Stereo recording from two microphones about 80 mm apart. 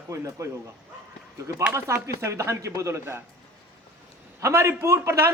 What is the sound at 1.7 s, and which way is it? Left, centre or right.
A man's voice, right.